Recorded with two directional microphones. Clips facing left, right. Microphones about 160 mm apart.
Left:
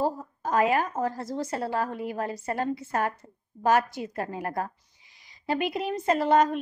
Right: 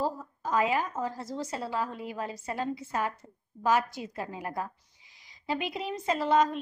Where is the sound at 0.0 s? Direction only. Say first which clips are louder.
Left 4 dB; 55° left (ahead or behind).